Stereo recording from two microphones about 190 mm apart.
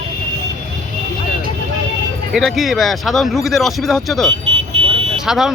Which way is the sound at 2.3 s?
Centre (ahead or behind).